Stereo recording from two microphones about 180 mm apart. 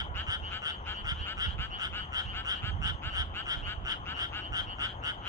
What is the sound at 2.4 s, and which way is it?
Frog, 20° right (ahead or behind).